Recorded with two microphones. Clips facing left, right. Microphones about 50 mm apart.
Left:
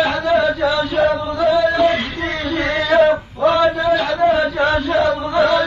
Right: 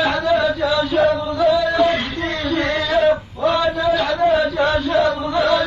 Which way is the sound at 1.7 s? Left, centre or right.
Centre.